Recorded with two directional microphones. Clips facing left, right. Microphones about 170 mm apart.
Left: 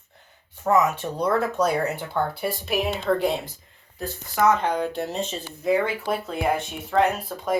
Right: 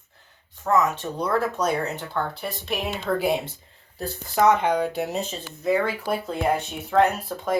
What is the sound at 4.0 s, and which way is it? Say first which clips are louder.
Speech: right 1 dB; 35° right (ahead or behind).